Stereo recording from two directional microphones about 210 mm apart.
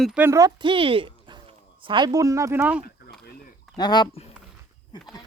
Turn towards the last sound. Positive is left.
turn(degrees=25)  # may be behind; listen again after turning